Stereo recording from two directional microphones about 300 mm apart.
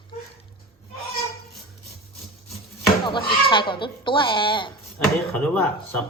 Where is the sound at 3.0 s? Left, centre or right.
Centre.